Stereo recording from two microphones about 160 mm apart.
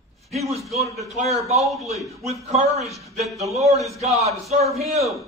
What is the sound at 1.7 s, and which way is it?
Speech, centre (ahead or behind).